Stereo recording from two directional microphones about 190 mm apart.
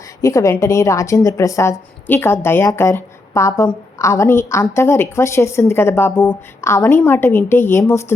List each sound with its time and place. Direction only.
0.2 s a woman's voice: 15° left (ahead or behind)